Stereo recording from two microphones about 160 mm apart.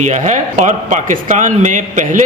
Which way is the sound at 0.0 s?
50° right (ahead or behind).